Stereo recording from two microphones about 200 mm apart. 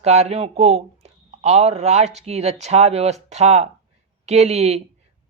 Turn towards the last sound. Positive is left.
turn(degrees=-30)  # may be behind; listen again after turning